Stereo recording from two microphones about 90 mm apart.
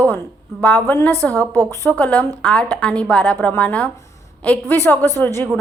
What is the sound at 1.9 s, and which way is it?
A woman's voice, 15° left (ahead or behind).